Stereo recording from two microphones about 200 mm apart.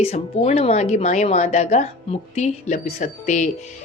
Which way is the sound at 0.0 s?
30° left (ahead or behind).